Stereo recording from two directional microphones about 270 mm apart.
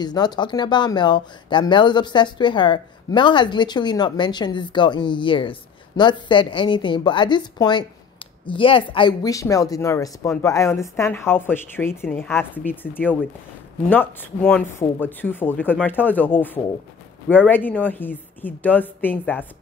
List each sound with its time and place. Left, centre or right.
0.0 s speech: centre
17.5 s speech: centre